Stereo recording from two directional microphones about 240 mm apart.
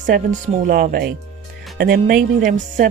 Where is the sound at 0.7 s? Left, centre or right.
Right.